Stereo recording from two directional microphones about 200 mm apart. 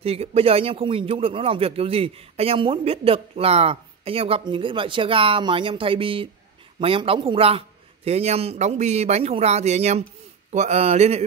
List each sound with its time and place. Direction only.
0.0 s a man's voice: 30° right (ahead or behind)